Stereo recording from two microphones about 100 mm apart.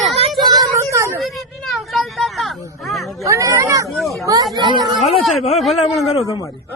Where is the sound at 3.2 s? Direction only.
30° right (ahead or behind).